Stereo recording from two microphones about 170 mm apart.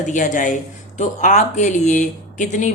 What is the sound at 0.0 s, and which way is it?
Speech, 45° left (ahead or behind).